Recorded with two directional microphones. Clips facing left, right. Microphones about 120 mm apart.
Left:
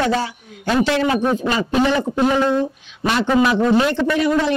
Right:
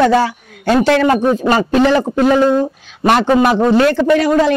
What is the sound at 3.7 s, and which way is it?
Speech, 70° right (ahead or behind).